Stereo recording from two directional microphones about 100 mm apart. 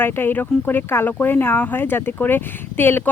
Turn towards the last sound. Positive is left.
turn(degrees=20)  # may be behind; listen again after turning